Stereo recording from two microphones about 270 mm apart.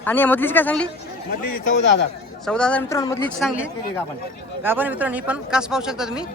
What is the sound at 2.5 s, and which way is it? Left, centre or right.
Speech, centre.